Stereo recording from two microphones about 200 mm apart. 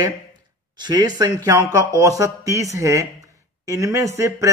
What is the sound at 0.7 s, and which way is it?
A man's voice, 20° right (ahead or behind).